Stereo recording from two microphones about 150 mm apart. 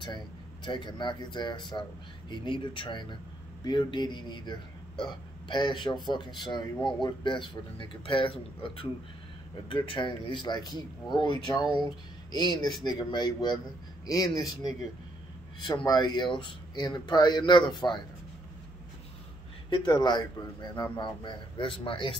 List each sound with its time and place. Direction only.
0.7 s speech: 30° left (ahead or behind)
19.7 s speech: 30° left (ahead or behind)